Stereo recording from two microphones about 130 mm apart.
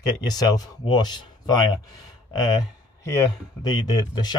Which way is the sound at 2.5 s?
25° left (ahead or behind).